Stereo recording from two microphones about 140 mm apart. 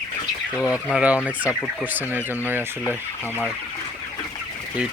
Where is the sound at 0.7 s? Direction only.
5° right (ahead or behind).